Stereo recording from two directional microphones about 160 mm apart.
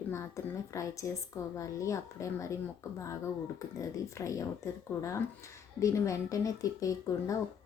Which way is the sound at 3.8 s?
20° left (ahead or behind).